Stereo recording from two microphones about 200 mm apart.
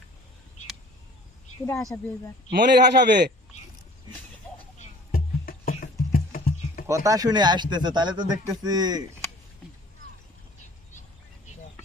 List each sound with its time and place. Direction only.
1.9 s speech: 15° left (ahead or behind)
2.5 s a man's voice: 55° right (ahead or behind)
5.1 s music: 45° left (ahead or behind)
6.8 s speech: 15° right (ahead or behind)